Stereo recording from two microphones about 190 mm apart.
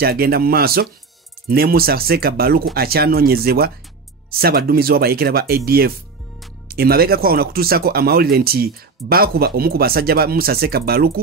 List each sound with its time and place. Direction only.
0.0 s speech: 55° right (ahead or behind)